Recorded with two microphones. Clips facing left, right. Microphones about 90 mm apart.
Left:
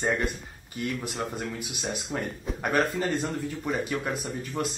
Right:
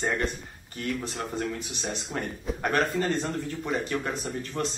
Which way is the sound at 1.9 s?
5° left (ahead or behind).